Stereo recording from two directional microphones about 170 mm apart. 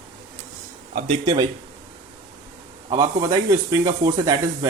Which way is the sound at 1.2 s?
25° right (ahead or behind).